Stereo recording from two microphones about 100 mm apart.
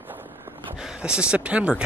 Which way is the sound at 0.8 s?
10° right (ahead or behind).